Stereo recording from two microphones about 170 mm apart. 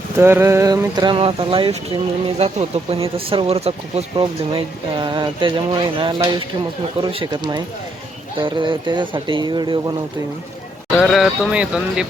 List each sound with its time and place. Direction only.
0.2 s speech: 15° right (ahead or behind)
10.9 s speech: centre (ahead or behind)